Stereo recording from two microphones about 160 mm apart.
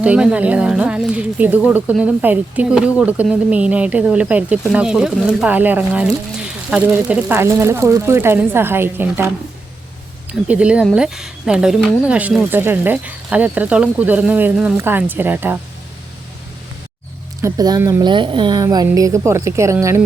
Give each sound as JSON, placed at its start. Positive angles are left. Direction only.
{"t": 0.0, "sound": "speech", "side_deg": -5}
{"t": 10.4, "sound": "speech", "side_deg": -5}
{"t": 17.4, "sound": "speech", "side_deg": -20}
{"t": 18.1, "sound": "speech", "side_deg": -30}